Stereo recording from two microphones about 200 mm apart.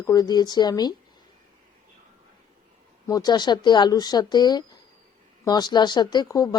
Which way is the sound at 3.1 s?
20° left (ahead or behind).